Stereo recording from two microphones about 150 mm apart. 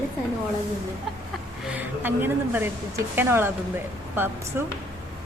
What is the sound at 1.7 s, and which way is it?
Speech, 10° right (ahead or behind).